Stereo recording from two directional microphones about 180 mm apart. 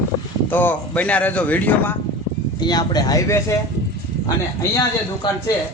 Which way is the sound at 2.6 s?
20° left (ahead or behind).